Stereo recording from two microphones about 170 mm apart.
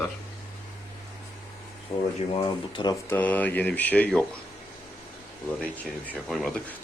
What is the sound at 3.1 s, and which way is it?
Speech, 10° left (ahead or behind).